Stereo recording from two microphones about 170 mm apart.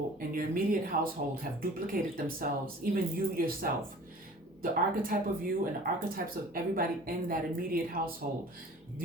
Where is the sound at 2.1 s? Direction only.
60° right (ahead or behind).